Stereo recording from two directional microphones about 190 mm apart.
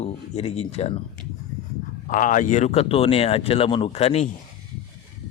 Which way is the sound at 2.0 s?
45° left (ahead or behind).